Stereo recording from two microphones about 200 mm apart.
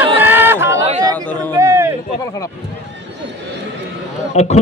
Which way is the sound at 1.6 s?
15° right (ahead or behind).